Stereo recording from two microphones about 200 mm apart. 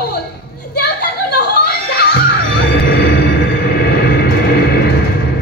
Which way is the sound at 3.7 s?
50° left (ahead or behind).